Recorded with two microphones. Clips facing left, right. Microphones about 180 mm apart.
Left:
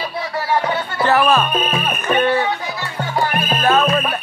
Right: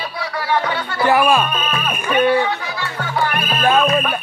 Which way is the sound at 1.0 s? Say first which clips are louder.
Right 1 dB; 10° right (ahead or behind).